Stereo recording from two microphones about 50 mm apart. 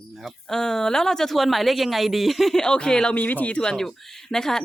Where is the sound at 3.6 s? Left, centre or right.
Centre.